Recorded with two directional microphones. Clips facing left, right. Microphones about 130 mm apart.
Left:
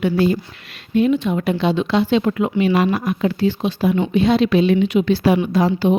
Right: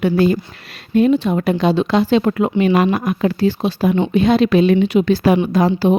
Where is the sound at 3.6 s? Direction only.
35° right (ahead or behind).